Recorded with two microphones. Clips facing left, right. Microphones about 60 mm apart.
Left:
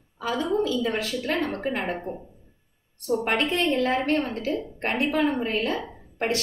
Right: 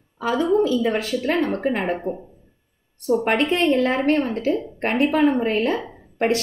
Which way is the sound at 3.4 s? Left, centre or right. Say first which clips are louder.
Right 5 dB; right.